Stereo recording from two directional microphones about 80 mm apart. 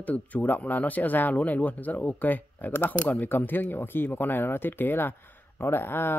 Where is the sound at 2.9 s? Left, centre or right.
Centre.